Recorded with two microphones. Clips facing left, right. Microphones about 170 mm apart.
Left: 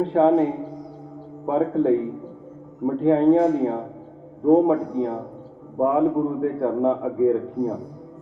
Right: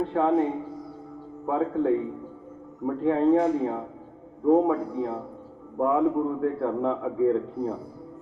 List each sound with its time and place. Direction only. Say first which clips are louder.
0.0 s a man's voice: left 5 dB; 25° left (ahead or behind)